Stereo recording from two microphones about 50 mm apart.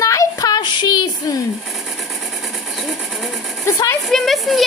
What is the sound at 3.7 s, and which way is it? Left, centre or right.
Speech, left.